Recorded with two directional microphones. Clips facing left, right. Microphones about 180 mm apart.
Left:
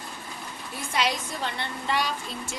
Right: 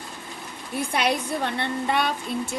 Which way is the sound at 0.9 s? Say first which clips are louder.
Right 3 dB; 60° right (ahead or behind).